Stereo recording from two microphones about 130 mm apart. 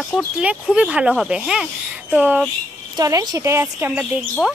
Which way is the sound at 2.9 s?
30° right (ahead or behind).